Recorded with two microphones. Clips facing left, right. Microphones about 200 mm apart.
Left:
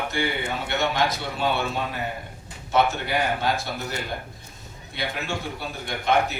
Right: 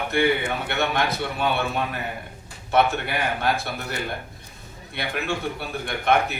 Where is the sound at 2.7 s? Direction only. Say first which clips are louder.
Right 1 dB; 60° right (ahead or behind).